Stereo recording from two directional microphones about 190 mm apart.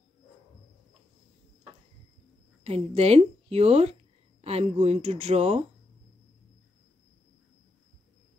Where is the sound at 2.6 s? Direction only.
35° right (ahead or behind).